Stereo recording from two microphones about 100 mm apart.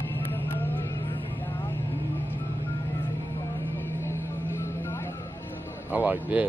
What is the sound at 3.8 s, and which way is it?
Vehicle, 25° left (ahead or behind).